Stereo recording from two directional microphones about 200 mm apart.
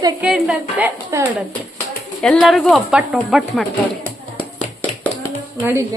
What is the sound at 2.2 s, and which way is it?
A woman's voice, centre (ahead or behind).